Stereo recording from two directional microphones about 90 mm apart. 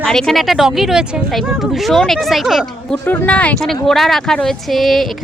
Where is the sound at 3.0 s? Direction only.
20° left (ahead or behind).